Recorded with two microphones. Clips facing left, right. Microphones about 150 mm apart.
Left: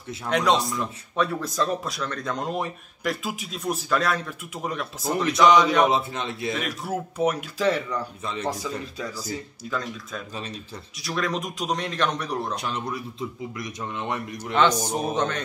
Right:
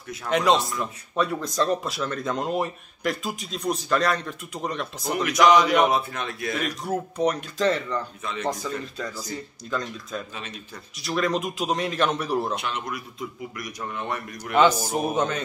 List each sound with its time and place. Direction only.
0.3 s speech: centre (ahead or behind)
5.1 s a man's voice: 30° left (ahead or behind)
5.4 s speech: centre (ahead or behind)
5.9 s a man's voice: 25° left (ahead or behind)
6.5 s speech: 5° left (ahead or behind)
9.7 s speech: centre (ahead or behind)
12.5 s speech: 35° left (ahead or behind)
13.6 s a man's voice: 20° left (ahead or behind)
14.5 s a man's voice: 10° right (ahead or behind)